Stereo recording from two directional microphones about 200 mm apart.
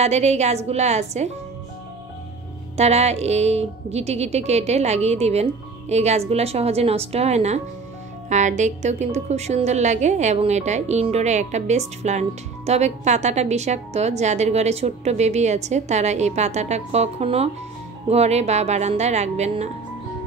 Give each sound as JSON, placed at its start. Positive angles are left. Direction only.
{"t": 0.0, "sound": "a woman's voice", "side_deg": -35}
{"t": 2.8, "sound": "a woman's voice", "side_deg": -30}